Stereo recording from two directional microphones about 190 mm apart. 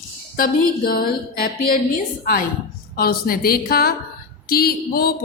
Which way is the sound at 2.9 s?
50° left (ahead or behind).